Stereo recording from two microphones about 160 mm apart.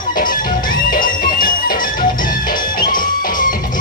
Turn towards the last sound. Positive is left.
turn(degrees=60)  # may be behind; listen again after turning